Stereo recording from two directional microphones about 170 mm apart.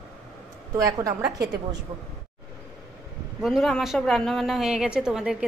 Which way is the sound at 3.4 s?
Centre (ahead or behind).